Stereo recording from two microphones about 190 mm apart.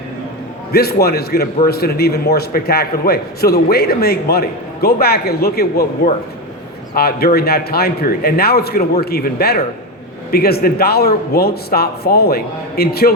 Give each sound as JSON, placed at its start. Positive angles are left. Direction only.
{"t": 0.7, "sound": "a man's voice", "side_deg": 55}
{"t": 6.9, "sound": "a man's voice", "side_deg": 55}